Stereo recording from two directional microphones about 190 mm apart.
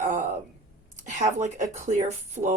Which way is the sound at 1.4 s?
40° right (ahead or behind).